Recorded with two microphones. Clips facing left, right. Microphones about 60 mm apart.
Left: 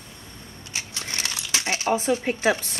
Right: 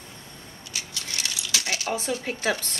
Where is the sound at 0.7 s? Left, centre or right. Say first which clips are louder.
Left 2 dB; left.